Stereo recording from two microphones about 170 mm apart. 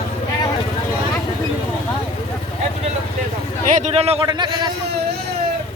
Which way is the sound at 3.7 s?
45° right (ahead or behind).